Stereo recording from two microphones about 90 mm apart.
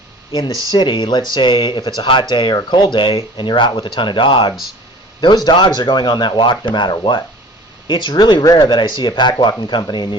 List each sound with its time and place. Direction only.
0.3 s speech: 50° left (ahead or behind); by 4.5 s 70° left (ahead or behind)
5.2 s speech: 55° left (ahead or behind)